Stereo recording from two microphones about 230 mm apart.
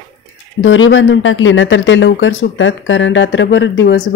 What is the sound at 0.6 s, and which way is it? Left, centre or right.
Speech, left.